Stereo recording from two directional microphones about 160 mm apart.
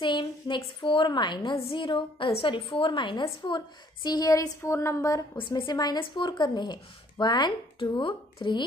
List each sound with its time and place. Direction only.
0.0 s a woman's voice: 30° left (ahead or behind)